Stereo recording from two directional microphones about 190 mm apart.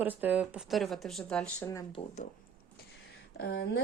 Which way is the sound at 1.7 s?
20° left (ahead or behind).